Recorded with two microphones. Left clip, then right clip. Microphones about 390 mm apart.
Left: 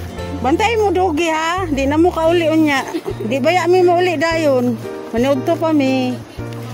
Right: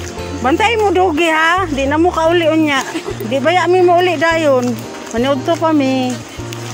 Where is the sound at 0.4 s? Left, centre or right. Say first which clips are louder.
Right 2 dB; left.